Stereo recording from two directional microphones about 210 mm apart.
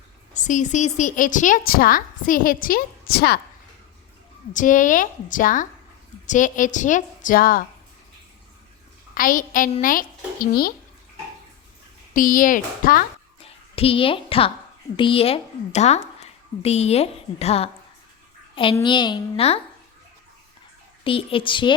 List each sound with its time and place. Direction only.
0.3 s a woman's voice: 35° left (ahead or behind)
4.5 s a woman's voice: 40° left (ahead or behind)
9.1 s a woman's voice: 40° left (ahead or behind)
12.1 s a woman's voice: 40° left (ahead or behind)
13.4 s a woman's voice: 25° left (ahead or behind)
21.0 s a woman's voice: 25° left (ahead or behind)